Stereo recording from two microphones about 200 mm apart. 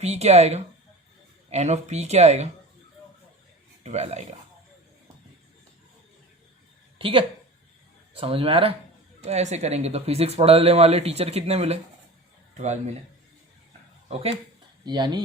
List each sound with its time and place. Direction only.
0.0 s speech: 30° right (ahead or behind)
3.8 s speech: 35° right (ahead or behind)
7.0 s a woman's voice: 25° right (ahead or behind)
14.1 s speech: 30° right (ahead or behind)
14.8 s speech: 20° right (ahead or behind)